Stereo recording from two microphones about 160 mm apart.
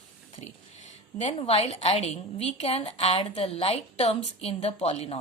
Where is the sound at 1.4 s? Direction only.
40° left (ahead or behind).